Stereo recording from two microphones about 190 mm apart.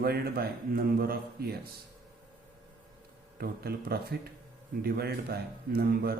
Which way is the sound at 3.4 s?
55° right (ahead or behind).